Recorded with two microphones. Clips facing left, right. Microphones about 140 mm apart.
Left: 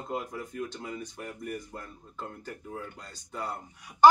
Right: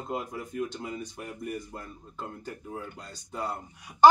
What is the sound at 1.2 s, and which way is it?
A man's voice, 15° right (ahead or behind).